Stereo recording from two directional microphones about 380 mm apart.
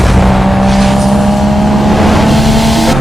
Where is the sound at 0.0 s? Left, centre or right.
Centre.